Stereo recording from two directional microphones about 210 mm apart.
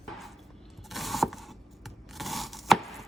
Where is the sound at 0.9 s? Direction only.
Centre (ahead or behind).